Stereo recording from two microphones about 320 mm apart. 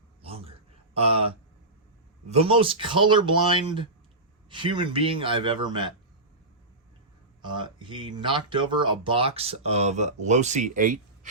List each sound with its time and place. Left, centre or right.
0.3 s a sound: centre
0.9 s speech: centre
2.3 s speech: centre
7.4 s speech: centre